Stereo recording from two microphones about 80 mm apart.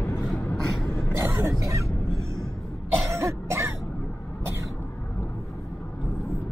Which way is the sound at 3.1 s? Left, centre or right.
Right.